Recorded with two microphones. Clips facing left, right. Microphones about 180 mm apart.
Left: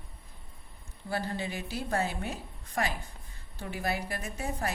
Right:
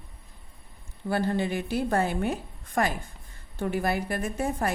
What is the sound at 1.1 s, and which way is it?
A woman's voice, 55° right (ahead or behind).